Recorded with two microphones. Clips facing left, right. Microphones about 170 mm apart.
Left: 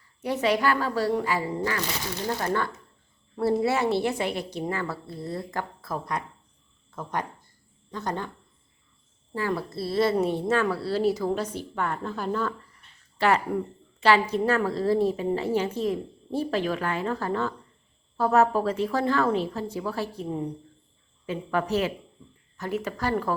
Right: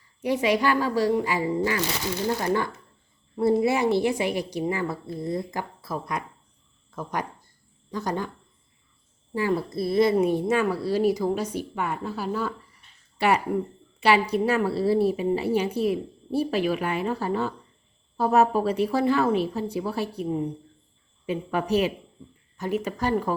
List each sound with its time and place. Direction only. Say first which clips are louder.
0.2 s a woman's voice: right 2 dB; 15° right (ahead or behind)
9.3 s a woman's voice: right 3 dB; 15° right (ahead or behind)
21.2 s a woman's voice: right 1 dB; 15° right (ahead or behind)